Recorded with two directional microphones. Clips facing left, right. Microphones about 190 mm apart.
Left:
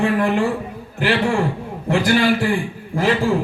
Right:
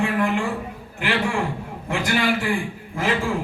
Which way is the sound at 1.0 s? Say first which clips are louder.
Left 5 dB; 35° left (ahead or behind).